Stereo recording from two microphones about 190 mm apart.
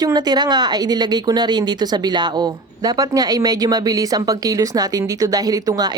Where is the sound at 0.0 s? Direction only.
20° right (ahead or behind).